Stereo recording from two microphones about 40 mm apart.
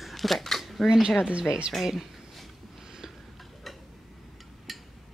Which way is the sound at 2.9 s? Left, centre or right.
Centre.